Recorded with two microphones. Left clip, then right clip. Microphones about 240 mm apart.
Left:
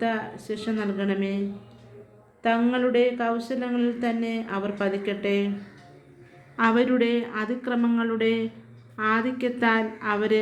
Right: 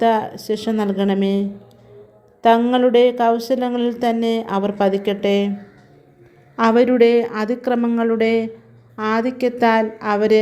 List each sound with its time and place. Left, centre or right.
0.4 s a woman's voice: right
6.6 s a woman's voice: right